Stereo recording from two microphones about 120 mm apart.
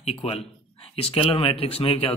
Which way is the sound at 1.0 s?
50° left (ahead or behind).